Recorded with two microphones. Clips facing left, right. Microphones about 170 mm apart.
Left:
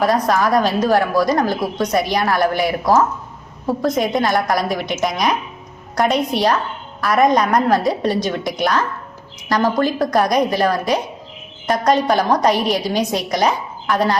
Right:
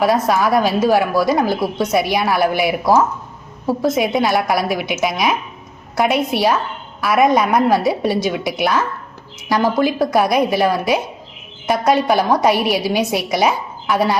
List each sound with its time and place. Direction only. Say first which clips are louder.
0.0 s a woman's voice: right 1 dB; 5° right (ahead or behind)